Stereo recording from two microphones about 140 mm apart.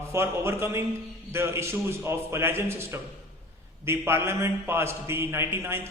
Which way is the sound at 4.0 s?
15° right (ahead or behind).